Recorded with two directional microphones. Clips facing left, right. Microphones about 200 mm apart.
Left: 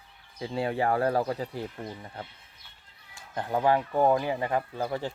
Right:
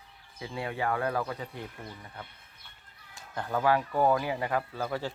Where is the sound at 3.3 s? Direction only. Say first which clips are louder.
Left 2 dB; 20° left (ahead or behind).